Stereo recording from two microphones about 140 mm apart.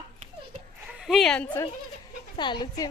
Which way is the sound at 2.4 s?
35° left (ahead or behind).